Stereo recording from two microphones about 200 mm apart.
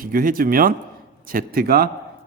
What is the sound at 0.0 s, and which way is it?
Speech, 45° right (ahead or behind).